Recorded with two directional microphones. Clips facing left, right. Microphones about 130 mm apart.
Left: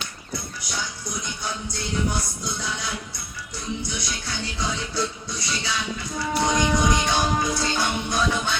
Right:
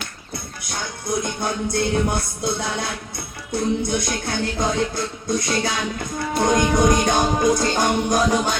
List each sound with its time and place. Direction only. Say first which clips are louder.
0.6 s music: right 3 dB; 55° right (ahead or behind)